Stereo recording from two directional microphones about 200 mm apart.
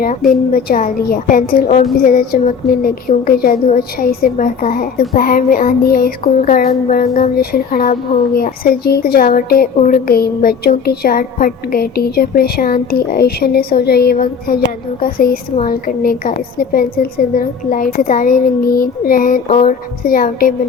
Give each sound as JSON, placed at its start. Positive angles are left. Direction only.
{"t": 0.5, "sound": "a woman's voice", "side_deg": 45}